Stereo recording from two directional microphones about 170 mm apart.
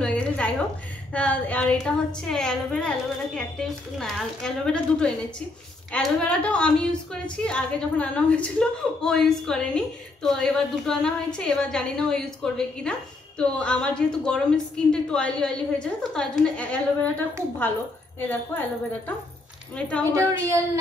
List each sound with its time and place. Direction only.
0.0 s a sound: 5° left (ahead or behind)
1.1 s a woman's voice: 10° left (ahead or behind)
18.3 s speech: 10° left (ahead or behind)
20.1 s a woman's voice: 20° right (ahead or behind)